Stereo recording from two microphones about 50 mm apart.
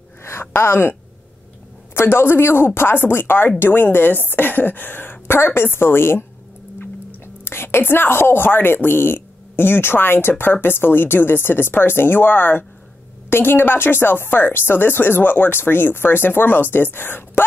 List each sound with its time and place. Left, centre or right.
0.2 s a sound: left
0.6 s a woman's voice: left
2.0 s a woman's voice: left
7.4 s a woman's voice: left